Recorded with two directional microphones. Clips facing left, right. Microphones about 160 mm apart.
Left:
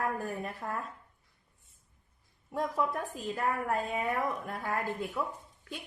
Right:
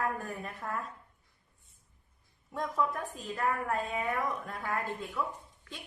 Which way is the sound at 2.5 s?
25° left (ahead or behind).